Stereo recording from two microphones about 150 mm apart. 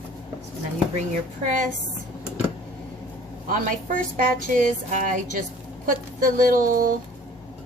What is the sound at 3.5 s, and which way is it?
Speech, 65° right (ahead or behind).